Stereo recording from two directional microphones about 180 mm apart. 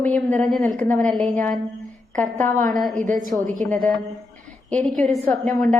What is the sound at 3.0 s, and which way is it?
Speech, 45° right (ahead or behind).